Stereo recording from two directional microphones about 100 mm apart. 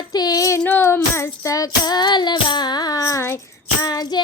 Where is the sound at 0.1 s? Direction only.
40° left (ahead or behind).